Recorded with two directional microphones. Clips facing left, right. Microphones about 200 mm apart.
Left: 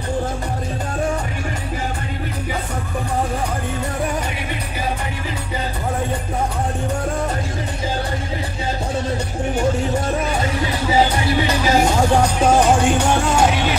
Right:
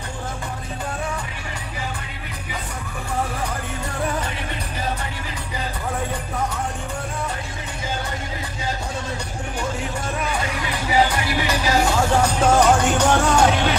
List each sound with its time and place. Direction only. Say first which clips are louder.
10.2 s music: left 4 dB; 30° left (ahead or behind)
12.4 s music: even; 10° left (ahead or behind)